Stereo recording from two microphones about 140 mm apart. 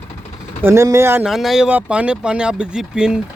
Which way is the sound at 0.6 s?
20° right (ahead or behind).